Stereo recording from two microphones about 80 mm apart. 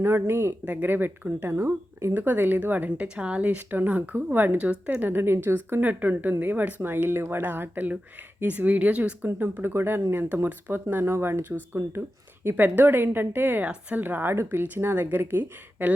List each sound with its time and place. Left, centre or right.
0.0 s a woman's voice: right
2.1 s a woman's voice: right